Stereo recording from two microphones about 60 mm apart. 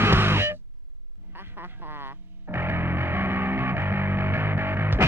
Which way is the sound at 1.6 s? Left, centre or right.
Right.